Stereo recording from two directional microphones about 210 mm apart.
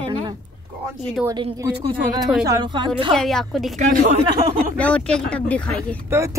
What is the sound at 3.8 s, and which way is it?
Speech, 40° right (ahead or behind).